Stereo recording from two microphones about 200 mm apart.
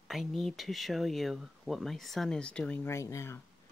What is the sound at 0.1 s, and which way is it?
Speech, centre (ahead or behind).